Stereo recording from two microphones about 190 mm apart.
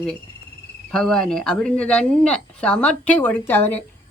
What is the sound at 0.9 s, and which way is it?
A woman's voice, 5° left (ahead or behind).